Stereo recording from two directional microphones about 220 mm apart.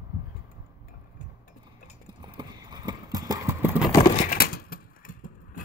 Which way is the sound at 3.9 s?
20° left (ahead or behind).